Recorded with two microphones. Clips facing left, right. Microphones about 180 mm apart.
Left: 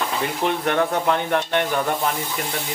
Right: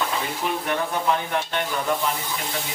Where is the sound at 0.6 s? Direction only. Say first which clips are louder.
Left 3 dB; 60° left (ahead or behind).